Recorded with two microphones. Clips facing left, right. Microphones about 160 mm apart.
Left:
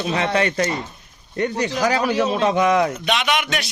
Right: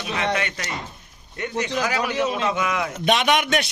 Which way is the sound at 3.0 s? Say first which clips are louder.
Right 2 dB; 45° right (ahead or behind).